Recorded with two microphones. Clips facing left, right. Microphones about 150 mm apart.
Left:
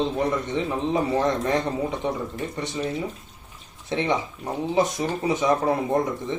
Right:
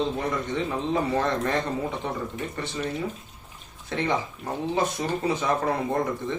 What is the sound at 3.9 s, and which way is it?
Speech, 20° left (ahead or behind).